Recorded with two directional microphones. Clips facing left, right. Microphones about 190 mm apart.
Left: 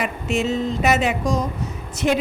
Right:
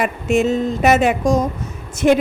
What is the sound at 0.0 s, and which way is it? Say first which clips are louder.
Speech: right 6 dB; 50° right (ahead or behind).